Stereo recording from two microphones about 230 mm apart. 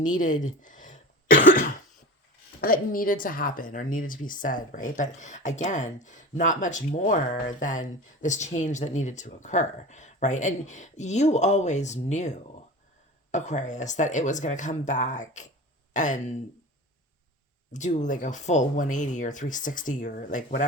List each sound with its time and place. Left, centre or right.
0.0 s cough: left
2.6 s a woman's voice: left
13.3 s a woman's voice: left
17.7 s a woman's voice: left